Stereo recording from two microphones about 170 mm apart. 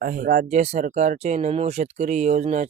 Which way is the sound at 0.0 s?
50° right (ahead or behind).